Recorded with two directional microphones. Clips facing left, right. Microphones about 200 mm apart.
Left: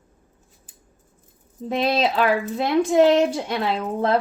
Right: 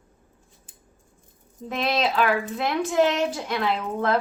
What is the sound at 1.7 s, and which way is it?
A woman's voice, 30° left (ahead or behind).